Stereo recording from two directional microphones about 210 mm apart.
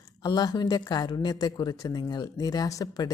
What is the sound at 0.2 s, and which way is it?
A woman's voice, 20° left (ahead or behind).